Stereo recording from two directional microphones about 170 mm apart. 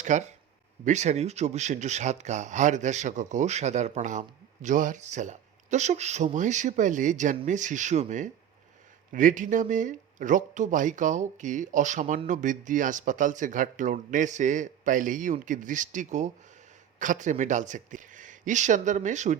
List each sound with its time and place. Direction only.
0.0 s speech: 45° right (ahead or behind)